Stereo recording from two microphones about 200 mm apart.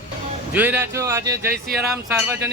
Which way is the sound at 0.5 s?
10° right (ahead or behind).